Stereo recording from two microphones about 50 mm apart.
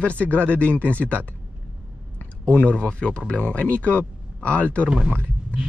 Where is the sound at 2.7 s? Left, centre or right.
Left.